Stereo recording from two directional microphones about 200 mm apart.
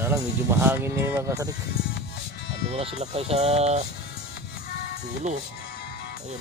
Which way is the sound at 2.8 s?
30° right (ahead or behind).